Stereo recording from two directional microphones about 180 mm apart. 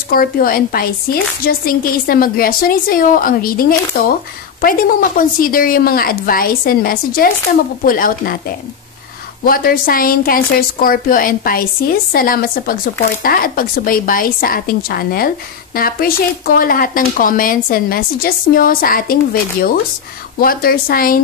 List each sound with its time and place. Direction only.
0.1 s a woman's voice: 55° left (ahead or behind)
9.4 s a woman's voice: 55° left (ahead or behind)
20.3 s a woman's voice: 55° left (ahead or behind)